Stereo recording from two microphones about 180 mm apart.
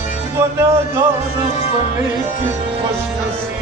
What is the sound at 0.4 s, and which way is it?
Music, 15° right (ahead or behind).